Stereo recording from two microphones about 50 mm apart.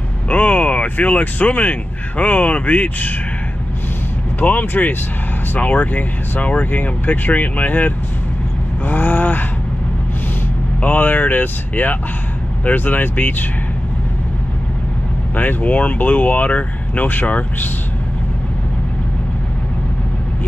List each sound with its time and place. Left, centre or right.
0.3 s speech: left
4.4 s speech: left
10.8 s speech: left
15.3 s speech: left